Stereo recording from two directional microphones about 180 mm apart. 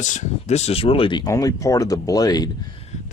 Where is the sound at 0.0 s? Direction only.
45° left (ahead or behind); by 2.5 s 20° left (ahead or behind).